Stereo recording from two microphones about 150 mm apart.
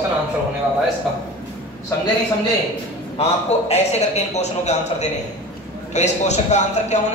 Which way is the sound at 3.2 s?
45° left (ahead or behind).